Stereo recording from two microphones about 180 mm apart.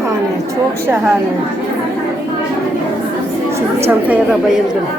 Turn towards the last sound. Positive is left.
turn(degrees=-10)  # may be behind; listen again after turning